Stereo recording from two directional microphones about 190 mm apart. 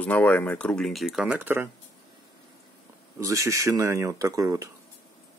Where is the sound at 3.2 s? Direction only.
15° right (ahead or behind).